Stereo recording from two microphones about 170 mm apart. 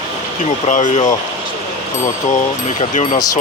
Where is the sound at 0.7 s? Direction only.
45° left (ahead or behind).